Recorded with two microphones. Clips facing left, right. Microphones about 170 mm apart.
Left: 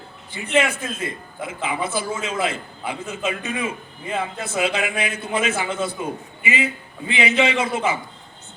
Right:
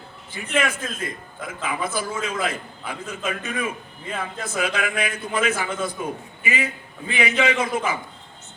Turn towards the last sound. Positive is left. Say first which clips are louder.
# left 1 dB
turn(degrees=25)  # may be behind; listen again after turning